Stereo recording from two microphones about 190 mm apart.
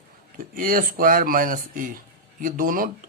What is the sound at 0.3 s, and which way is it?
Speech, 50° right (ahead or behind).